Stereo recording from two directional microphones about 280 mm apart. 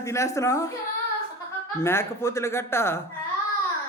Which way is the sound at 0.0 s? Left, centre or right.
Centre.